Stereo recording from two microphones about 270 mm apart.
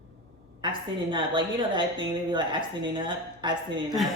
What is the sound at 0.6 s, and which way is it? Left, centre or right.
A woman's voice, centre.